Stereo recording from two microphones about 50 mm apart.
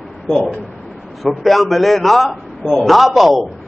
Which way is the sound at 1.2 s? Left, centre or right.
Centre.